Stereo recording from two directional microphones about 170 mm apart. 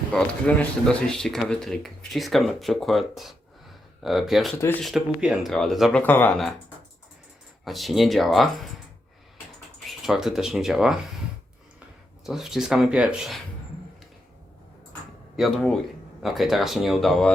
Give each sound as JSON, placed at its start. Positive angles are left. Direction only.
{"t": 0.1, "sound": "speech", "side_deg": 5}
{"t": 4.5, "sound": "speech", "side_deg": 15}
{"t": 4.8, "sound": "speech", "side_deg": 0}
{"t": 7.6, "sound": "speech", "side_deg": 0}
{"t": 10.0, "sound": "speech", "side_deg": 0}
{"t": 12.2, "sound": "speech", "side_deg": 0}
{"t": 15.4, "sound": "speech", "side_deg": 0}